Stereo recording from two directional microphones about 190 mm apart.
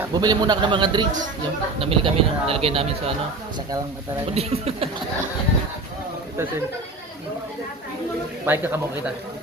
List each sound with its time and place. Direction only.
0.1 s speech: 20° right (ahead or behind)
4.4 s speech: 30° right (ahead or behind)
8.4 s speech: 10° right (ahead or behind)